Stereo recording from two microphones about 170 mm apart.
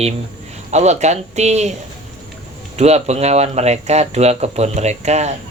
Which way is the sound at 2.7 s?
40° right (ahead or behind).